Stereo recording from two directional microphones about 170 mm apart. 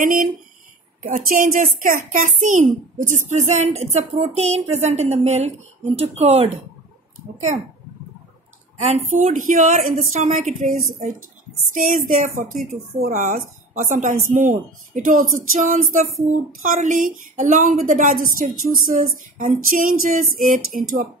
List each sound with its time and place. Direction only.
0.0 s a child's voice: 55° right (ahead or behind)
8.7 s a child's voice: 40° right (ahead or behind)